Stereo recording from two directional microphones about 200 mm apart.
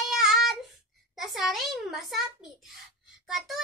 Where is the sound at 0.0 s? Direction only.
Centre (ahead or behind).